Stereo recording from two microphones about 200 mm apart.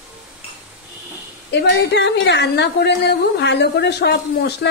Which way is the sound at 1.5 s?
60° left (ahead or behind).